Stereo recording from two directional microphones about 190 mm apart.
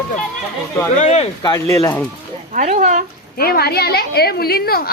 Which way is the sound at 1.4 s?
15° left (ahead or behind).